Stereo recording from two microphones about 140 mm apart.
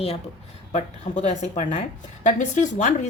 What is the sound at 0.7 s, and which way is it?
A woman's voice, 60° left (ahead or behind).